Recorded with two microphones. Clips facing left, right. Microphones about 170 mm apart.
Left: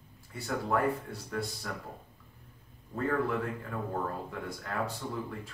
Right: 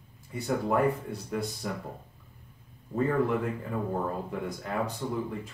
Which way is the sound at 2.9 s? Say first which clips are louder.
Right 4 dB; 15° right (ahead or behind).